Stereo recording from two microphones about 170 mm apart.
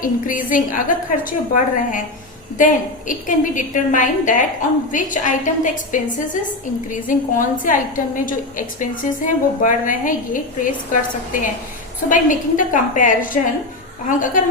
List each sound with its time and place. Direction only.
0.0 s a woman's voice: 55° left (ahead or behind)
3.1 s a woman's voice: 50° left (ahead or behind)
12.0 s a woman's voice: 50° left (ahead or behind)